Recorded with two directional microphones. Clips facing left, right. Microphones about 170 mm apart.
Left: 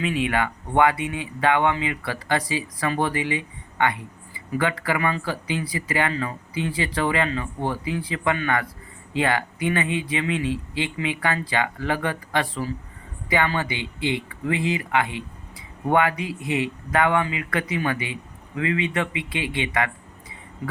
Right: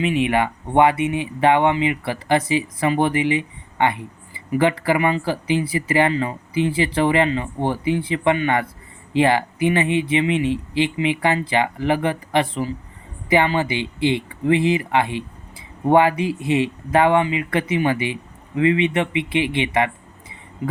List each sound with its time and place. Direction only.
0.0 s speech: 20° right (ahead or behind)